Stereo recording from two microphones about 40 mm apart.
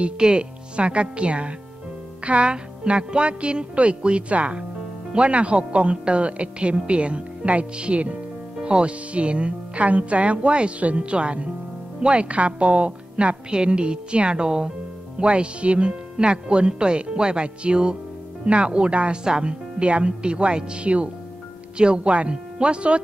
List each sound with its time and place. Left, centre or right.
0.0 s speech: right